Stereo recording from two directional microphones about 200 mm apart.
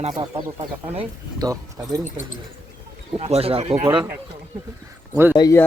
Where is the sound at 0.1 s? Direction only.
20° right (ahead or behind).